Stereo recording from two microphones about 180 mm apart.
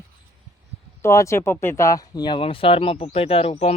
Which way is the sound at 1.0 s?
15° left (ahead or behind).